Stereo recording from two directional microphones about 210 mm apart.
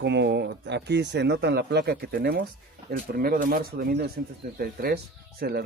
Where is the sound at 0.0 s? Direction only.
55° right (ahead or behind).